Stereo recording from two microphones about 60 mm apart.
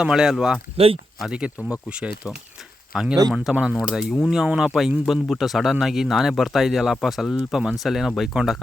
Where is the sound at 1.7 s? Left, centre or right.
Centre.